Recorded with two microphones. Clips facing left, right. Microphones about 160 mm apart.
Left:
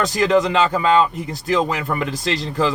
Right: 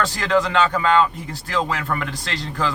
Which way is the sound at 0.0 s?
20° left (ahead or behind).